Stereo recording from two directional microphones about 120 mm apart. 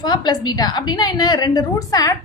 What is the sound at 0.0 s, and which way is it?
A woman's voice, 35° left (ahead or behind).